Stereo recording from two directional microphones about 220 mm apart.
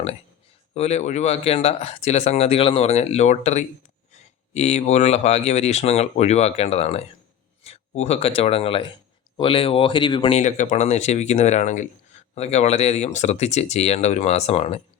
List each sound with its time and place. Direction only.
0.7 s speech: 30° left (ahead or behind)